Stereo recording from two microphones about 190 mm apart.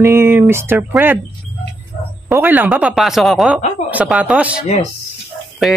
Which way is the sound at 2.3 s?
10° right (ahead or behind).